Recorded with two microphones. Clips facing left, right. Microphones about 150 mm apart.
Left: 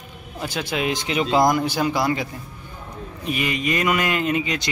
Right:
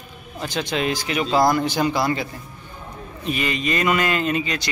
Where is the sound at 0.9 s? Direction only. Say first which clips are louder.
Even; 20° left (ahead or behind).